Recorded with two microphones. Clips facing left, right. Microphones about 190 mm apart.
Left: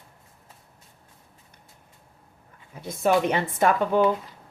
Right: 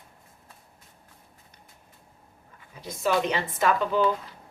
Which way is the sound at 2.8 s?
55° left (ahead or behind).